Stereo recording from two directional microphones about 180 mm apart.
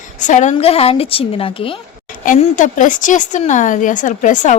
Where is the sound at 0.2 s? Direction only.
45° left (ahead or behind).